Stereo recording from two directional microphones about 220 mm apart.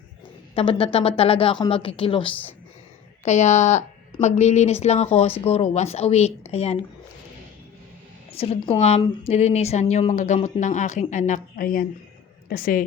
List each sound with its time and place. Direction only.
0.5 s a woman's voice: 25° left (ahead or behind)
8.3 s a woman's voice: 25° left (ahead or behind)